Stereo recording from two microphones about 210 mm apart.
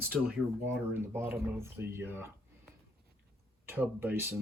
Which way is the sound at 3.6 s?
10° right (ahead or behind).